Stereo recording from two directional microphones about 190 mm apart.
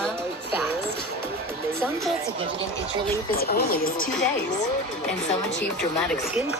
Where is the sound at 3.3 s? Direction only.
55° left (ahead or behind).